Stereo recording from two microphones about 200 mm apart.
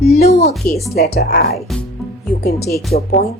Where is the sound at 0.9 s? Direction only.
50° left (ahead or behind).